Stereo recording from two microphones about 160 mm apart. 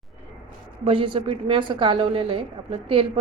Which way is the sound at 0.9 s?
35° right (ahead or behind).